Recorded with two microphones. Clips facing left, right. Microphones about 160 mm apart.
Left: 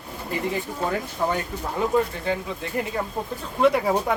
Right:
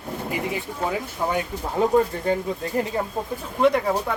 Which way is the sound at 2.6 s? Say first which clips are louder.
Right 3 dB; 40° right (ahead or behind).